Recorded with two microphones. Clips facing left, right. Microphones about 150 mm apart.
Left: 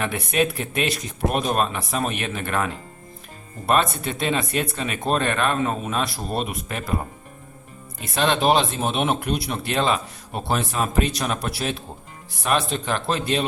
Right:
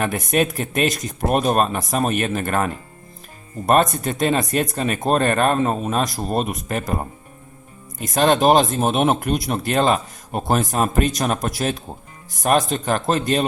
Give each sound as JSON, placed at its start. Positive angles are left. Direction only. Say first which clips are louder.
{"t": 0.0, "sound": "speech", "louder": "right 3 dB", "side_deg": -45}
{"t": 8.0, "sound": "speech", "louder": "right 4 dB", "side_deg": -45}